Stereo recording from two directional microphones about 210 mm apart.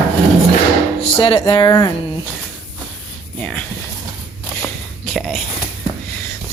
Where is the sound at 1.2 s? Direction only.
25° left (ahead or behind).